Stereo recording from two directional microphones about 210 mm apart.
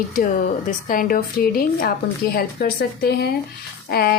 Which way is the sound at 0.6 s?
40° left (ahead or behind).